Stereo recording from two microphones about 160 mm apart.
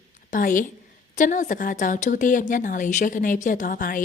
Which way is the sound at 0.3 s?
55° left (ahead or behind).